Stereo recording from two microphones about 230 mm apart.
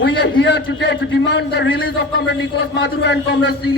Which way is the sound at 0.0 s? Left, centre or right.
Left.